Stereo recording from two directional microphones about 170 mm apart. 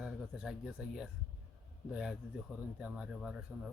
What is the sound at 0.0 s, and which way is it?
Speech, 5° right (ahead or behind).